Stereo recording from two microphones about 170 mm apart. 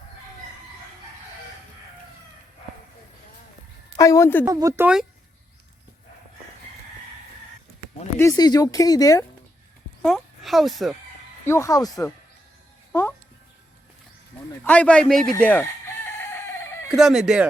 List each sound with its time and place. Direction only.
3.9 s a woman's voice: 20° left (ahead or behind)
4.4 s speech: 20° right (ahead or behind)
8.2 s speech: 20° left (ahead or behind)
10.0 s speech: centre (ahead or behind)
11.4 s a man's voice: 15° left (ahead or behind)
12.9 s music: 15° left (ahead or behind)
14.6 s a man's voice: 5° left (ahead or behind)
16.9 s fowl: 5° right (ahead or behind)